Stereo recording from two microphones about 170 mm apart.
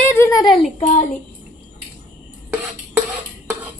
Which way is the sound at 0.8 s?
50° left (ahead or behind).